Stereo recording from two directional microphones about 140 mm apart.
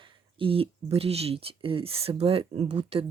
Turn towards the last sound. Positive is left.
turn(degrees=-50)  # may be behind; listen again after turning